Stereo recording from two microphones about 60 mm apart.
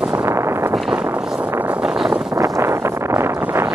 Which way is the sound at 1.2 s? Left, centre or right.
Centre.